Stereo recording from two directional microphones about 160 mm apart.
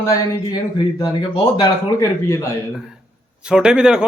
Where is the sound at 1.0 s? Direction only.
25° left (ahead or behind).